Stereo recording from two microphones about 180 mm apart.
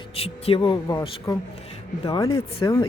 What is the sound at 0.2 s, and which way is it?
Speech, 30° left (ahead or behind).